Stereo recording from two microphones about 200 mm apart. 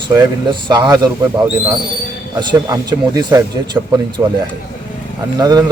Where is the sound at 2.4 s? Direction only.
20° right (ahead or behind).